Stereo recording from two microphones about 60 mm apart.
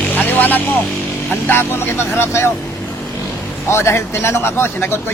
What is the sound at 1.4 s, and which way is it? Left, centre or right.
Speech, left.